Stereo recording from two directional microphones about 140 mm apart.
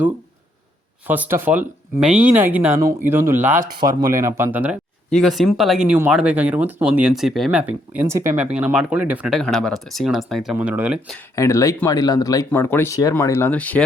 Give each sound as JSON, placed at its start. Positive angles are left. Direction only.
{"t": 1.0, "sound": "speech", "side_deg": -10}
{"t": 5.1, "sound": "speech", "side_deg": 0}
{"t": 8.4, "sound": "speech", "side_deg": -10}
{"t": 10.5, "sound": "speech", "side_deg": -10}
{"t": 11.3, "sound": "speech", "side_deg": 20}